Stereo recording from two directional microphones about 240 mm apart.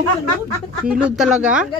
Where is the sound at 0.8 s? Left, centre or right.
Centre.